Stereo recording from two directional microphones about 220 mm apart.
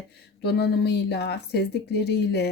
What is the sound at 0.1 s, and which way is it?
A woman's voice, 45° left (ahead or behind).